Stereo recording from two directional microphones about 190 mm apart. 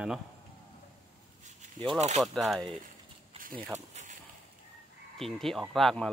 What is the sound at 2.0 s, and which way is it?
Speech, 35° right (ahead or behind).